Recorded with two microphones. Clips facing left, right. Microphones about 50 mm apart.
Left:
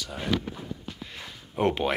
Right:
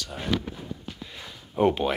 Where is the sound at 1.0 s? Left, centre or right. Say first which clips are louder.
Even; left.